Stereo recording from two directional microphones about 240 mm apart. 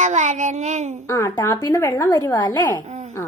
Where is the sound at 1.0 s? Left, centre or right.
Centre.